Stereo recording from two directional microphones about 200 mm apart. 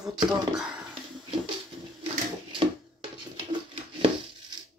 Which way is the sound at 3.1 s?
25° right (ahead or behind).